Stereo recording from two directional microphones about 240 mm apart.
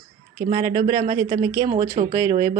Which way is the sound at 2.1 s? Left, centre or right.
Centre.